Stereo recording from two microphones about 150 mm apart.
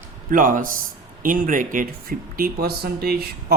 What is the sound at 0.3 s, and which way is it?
Speech, 65° right (ahead or behind).